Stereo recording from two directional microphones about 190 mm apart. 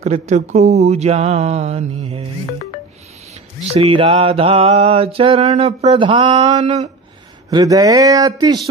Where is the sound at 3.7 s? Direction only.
30° right (ahead or behind).